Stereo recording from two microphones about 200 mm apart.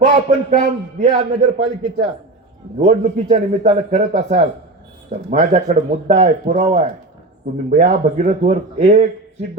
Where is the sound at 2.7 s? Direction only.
35° right (ahead or behind).